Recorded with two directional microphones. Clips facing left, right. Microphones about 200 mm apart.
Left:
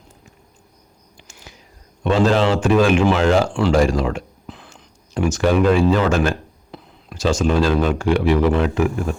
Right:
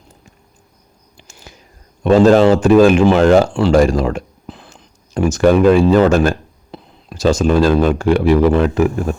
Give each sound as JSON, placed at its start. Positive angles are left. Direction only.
{"t": 1.1, "sound": "whispering", "side_deg": -40}
{"t": 2.0, "sound": "speech", "side_deg": -45}
{"t": 3.7, "sound": "a sound", "side_deg": -45}
{"t": 5.9, "sound": "speech", "side_deg": -40}